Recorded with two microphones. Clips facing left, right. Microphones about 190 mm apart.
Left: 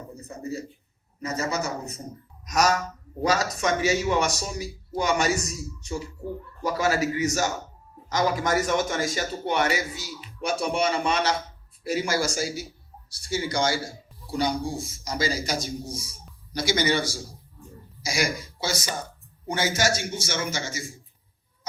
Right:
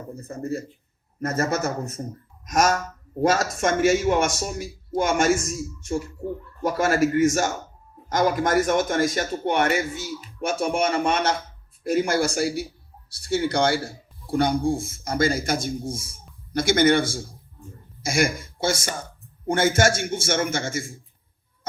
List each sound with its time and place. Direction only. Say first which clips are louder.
1.2 s speech: right 4 dB; 55° right (ahead or behind)